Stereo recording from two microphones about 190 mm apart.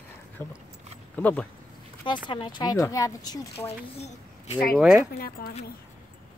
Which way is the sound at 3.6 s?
35° left (ahead or behind).